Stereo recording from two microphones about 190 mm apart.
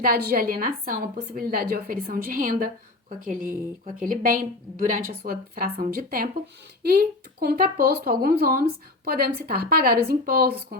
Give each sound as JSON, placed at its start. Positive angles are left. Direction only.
{"t": 0.0, "sound": "a woman's voice", "side_deg": -50}